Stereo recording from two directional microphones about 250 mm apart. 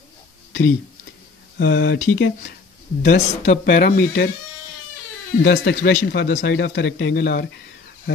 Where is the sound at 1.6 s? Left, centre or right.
Left.